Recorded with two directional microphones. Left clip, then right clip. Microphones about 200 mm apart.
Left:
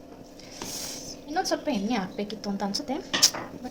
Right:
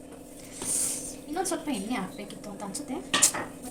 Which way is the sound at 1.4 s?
50° left (ahead or behind).